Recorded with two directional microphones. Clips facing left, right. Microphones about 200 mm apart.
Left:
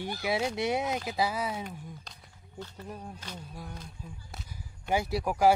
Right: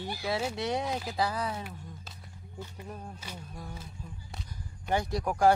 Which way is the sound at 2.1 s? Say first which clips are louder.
Right 3 dB; 10° right (ahead or behind).